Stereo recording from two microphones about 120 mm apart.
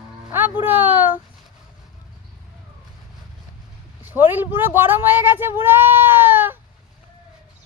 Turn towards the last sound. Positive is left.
turn(degrees=-15)  # may be behind; listen again after turning